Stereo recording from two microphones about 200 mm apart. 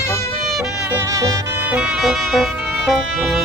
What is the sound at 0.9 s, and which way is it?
Music, 15° right (ahead or behind).